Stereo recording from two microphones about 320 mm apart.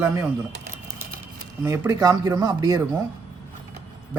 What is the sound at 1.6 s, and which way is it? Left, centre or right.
Speech, centre.